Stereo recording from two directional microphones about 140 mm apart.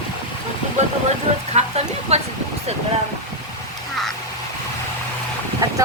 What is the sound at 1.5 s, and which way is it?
Speech, 50° right (ahead or behind).